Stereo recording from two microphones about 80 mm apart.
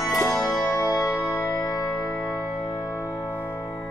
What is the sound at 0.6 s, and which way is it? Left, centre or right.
Music, left.